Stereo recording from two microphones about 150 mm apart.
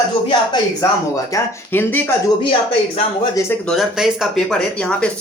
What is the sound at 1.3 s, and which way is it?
Speech, 15° left (ahead or behind).